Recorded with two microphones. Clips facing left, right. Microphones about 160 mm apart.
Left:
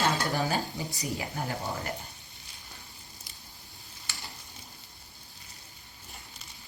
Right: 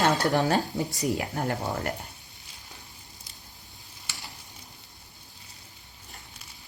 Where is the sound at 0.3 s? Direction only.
65° right (ahead or behind).